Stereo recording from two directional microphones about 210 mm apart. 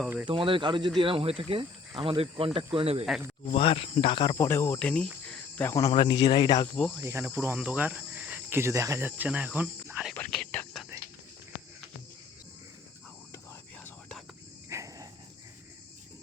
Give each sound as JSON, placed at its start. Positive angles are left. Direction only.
{"t": 0.0, "sound": "speech", "side_deg": -5}
{"t": 0.3, "sound": "speech", "side_deg": -25}
{"t": 3.4, "sound": "cricket", "side_deg": 25}
{"t": 4.4, "sound": "cricket", "side_deg": 10}
{"t": 7.0, "sound": "cricket", "side_deg": -10}
{"t": 10.2, "sound": "whispering", "side_deg": 5}
{"t": 13.3, "sound": "whispering", "side_deg": 10}
{"t": 14.7, "sound": "cricket", "side_deg": -15}